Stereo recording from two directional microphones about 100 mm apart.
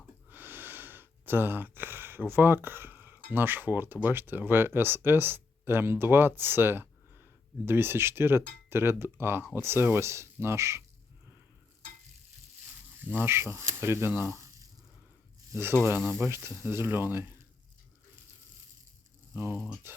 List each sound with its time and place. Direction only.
0.3 s speech: 20° right (ahead or behind)
13.0 s speech: 20° right (ahead or behind)
15.5 s speech: 25° right (ahead or behind)
19.4 s speech: 15° right (ahead or behind)